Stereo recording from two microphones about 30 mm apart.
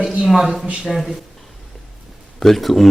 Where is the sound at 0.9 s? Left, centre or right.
Centre.